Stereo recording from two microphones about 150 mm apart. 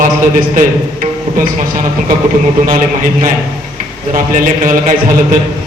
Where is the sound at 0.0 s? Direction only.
65° right (ahead or behind).